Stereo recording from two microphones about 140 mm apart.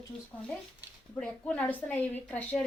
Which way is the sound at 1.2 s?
10° left (ahead or behind).